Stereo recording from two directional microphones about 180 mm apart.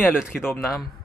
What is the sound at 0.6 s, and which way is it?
Speech, centre (ahead or behind).